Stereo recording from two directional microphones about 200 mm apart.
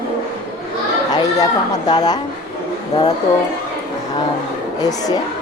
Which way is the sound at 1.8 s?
20° left (ahead or behind).